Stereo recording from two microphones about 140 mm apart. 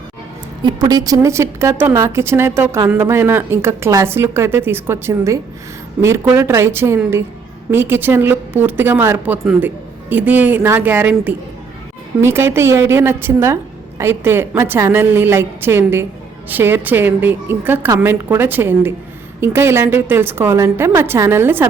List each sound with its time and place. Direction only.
0.6 s a woman's voice: 30° right (ahead or behind); by 11.1 s 10° right (ahead or behind)
12.2 s speech: 15° right (ahead or behind)